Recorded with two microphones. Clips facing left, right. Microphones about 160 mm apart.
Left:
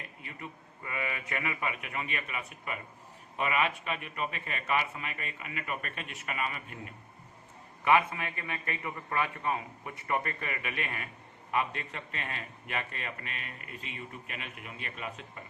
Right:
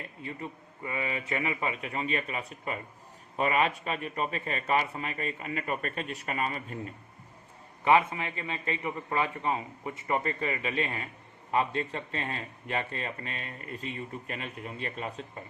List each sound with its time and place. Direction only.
0.2 s a man's voice: 30° right (ahead or behind)